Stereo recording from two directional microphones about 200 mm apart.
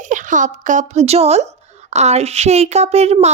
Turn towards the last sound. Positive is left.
turn(degrees=-35)  # may be behind; listen again after turning